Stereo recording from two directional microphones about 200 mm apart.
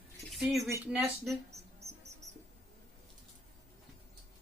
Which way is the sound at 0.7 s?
15° right (ahead or behind).